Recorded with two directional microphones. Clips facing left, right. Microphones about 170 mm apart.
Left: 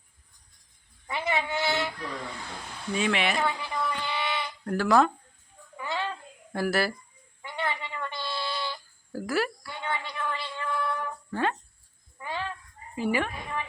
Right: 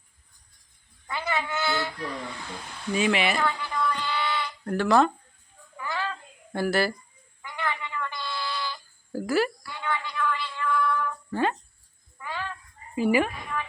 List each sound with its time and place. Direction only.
1.0 s speech: 20° left (ahead or behind)
2.9 s speech: 5° right (ahead or behind)
3.4 s a sound: 20° left (ahead or behind)
4.6 s speech: centre (ahead or behind)
5.7 s a sound: 25° left (ahead or behind)
6.5 s speech: centre (ahead or behind)
7.4 s a sound: 30° left (ahead or behind)
9.1 s speech: centre (ahead or behind)
9.6 s female singing: 25° left (ahead or behind)
11.3 s a sound: centre (ahead or behind)
12.2 s fowl: 25° left (ahead or behind)
13.0 s a woman's voice: 10° right (ahead or behind)